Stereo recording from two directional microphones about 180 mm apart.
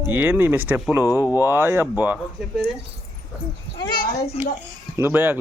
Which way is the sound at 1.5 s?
15° right (ahead or behind).